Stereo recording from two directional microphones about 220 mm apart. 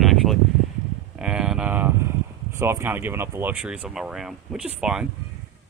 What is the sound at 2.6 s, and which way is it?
Speech, 10° right (ahead or behind).